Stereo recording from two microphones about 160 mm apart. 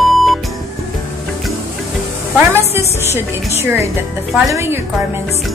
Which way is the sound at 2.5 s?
15° right (ahead or behind).